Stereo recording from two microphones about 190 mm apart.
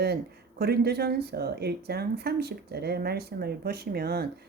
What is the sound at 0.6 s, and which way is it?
Speech, 55° right (ahead or behind).